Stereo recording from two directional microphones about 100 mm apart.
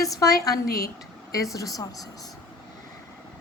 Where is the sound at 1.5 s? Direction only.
35° left (ahead or behind).